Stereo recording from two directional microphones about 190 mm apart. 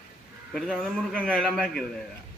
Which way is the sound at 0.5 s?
Centre (ahead or behind).